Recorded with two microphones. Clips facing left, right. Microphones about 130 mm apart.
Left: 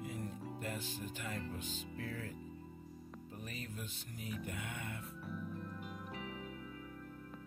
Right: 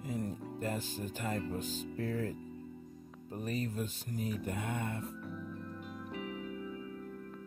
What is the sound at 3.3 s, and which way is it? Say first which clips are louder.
Speech: right 12 dB; 40° right (ahead or behind).